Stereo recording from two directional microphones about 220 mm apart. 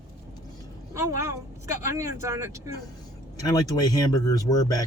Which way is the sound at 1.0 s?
15° right (ahead or behind).